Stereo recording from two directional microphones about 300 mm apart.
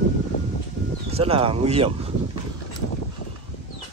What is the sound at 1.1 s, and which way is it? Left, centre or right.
Speech, centre.